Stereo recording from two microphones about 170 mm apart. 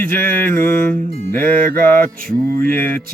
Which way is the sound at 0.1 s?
55° right (ahead or behind).